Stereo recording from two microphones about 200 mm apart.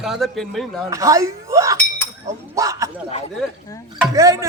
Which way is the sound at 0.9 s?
15° right (ahead or behind).